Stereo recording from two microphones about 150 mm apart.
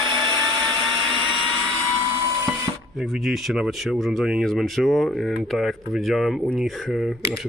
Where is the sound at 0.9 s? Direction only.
35° right (ahead or behind).